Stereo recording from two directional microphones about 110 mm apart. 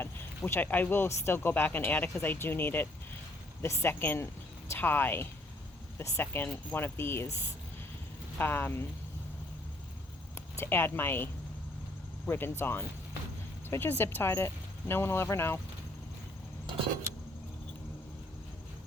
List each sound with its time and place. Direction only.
0.0 s speech: 20° left (ahead or behind)
8.4 s speech: 20° left (ahead or behind)
10.6 s speech: 20° left (ahead or behind)